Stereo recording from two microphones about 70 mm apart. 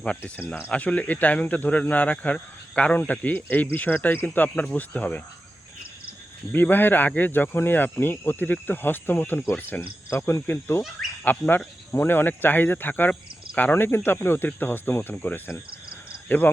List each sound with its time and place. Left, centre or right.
0.7 s speech: centre
6.5 s speech: left